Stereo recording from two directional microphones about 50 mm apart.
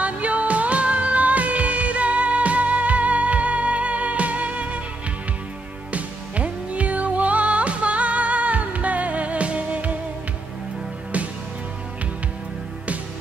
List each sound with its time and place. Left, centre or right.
0.0 s music: right
5.9 s music: right